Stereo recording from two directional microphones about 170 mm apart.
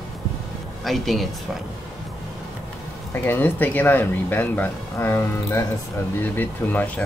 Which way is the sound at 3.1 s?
10° left (ahead or behind).